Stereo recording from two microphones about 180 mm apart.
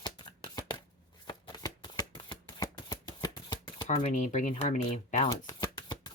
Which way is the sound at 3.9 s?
40° left (ahead or behind).